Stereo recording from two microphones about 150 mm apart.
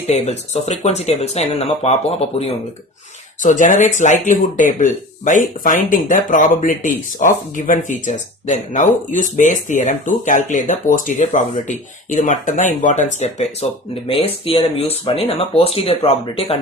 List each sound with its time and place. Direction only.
0.1 s speech: 45° left (ahead or behind)
3.4 s speech: 60° left (ahead or behind); by 16.6 s 40° left (ahead or behind)